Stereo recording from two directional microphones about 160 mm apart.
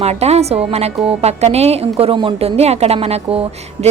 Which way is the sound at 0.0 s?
40° right (ahead or behind).